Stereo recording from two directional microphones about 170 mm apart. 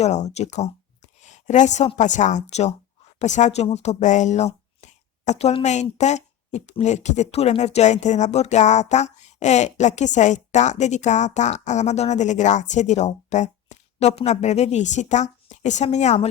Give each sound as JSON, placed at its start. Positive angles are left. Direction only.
{"t": 0.0, "sound": "speech", "side_deg": 40}